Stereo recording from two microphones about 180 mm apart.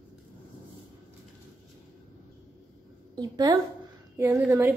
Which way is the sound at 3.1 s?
20° right (ahead or behind).